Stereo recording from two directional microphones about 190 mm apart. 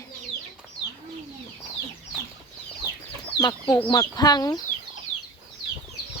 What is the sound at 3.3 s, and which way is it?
Speech, 25° left (ahead or behind).